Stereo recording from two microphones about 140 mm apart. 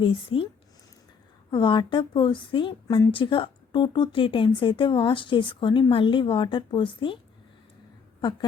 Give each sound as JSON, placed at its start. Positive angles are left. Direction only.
{"t": 0.0, "sound": "speech", "side_deg": 40}
{"t": 1.5, "sound": "speech", "side_deg": 35}
{"t": 8.2, "sound": "speech", "side_deg": 35}